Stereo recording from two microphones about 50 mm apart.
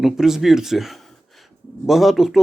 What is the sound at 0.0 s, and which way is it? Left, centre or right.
Speech, centre.